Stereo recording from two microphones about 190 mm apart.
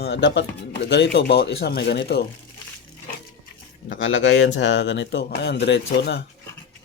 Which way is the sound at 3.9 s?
90° left.